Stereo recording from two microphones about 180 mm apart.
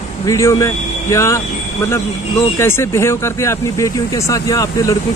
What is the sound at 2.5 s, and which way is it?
Speech, 15° left (ahead or behind).